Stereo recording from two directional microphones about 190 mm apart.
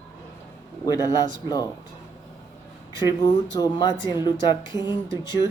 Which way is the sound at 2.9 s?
20° left (ahead or behind).